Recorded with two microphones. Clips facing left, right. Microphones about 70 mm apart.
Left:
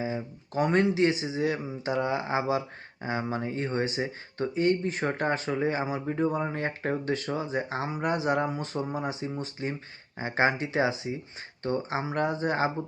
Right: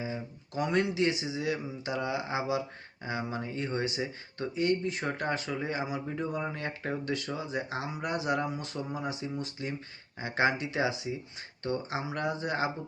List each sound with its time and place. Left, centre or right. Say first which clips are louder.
0.0 s speech: left 5 dB; left